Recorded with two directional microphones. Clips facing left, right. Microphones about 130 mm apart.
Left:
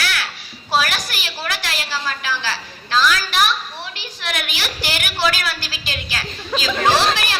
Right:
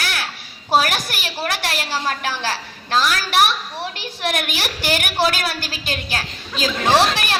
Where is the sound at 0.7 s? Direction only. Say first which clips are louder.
Right 2 dB; 50° right (ahead or behind).